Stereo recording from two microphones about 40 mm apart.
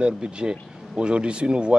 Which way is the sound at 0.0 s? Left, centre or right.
Right.